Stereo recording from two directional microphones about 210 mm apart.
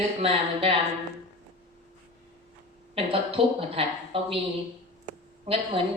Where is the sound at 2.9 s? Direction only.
25° right (ahead or behind).